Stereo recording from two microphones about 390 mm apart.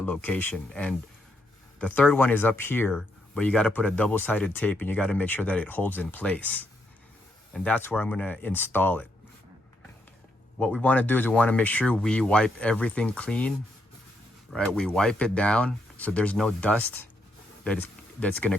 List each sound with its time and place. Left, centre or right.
0.0 s speech: centre
10.6 s speech: centre
14.5 s speech: centre